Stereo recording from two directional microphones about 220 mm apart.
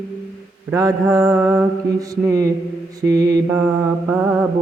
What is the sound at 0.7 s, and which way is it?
Mantra, 15° right (ahead or behind).